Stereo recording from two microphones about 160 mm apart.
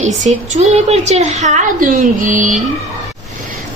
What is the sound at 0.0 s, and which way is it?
A woman's voice, 50° right (ahead or behind).